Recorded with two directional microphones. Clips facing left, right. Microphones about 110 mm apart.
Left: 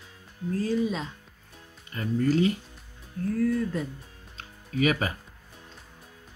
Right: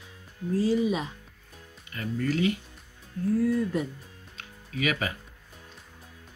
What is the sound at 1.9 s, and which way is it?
Speech, 30° left (ahead or behind).